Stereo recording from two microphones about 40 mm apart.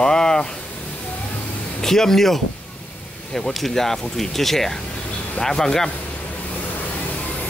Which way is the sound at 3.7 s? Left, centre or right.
Centre.